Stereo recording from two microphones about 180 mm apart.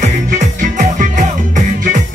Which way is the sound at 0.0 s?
45° right (ahead or behind).